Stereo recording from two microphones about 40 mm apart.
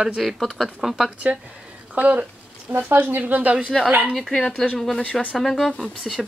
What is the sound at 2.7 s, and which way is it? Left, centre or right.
Speech, right.